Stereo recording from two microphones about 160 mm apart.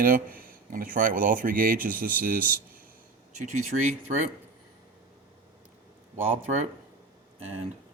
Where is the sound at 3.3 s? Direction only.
45° right (ahead or behind).